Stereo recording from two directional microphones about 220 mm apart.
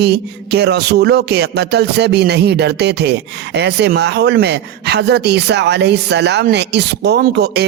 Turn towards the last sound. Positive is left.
turn(degrees=-50)  # may be behind; listen again after turning